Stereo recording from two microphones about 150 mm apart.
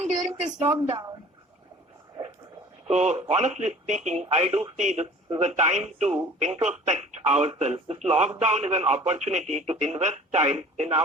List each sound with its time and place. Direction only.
0.0 s speech: 50° right (ahead or behind)
0.8 s speech: 35° right (ahead or behind)
2.8 s speech: 50° right (ahead or behind)